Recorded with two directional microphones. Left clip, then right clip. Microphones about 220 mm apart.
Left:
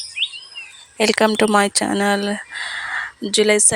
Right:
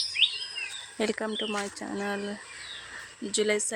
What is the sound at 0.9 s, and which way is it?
Speech, 35° left (ahead or behind).